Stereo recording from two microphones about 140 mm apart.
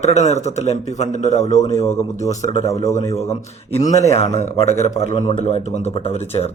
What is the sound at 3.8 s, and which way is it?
Speech, 55° left (ahead or behind).